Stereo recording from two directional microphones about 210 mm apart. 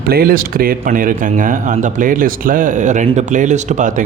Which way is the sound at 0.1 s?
45° right (ahead or behind).